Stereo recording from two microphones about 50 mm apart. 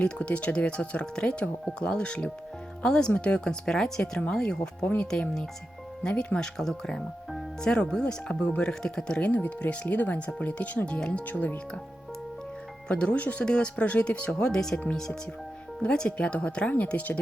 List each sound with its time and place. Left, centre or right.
0.0 s speech: left
6.0 s speech: centre
9.3 s speech: left
9.6 s speech: left
10.0 s speech: left
12.9 s speech: left
15.8 s speech: left